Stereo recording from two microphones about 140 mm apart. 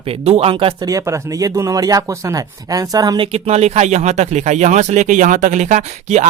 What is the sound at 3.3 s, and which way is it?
Speech, 50° right (ahead or behind).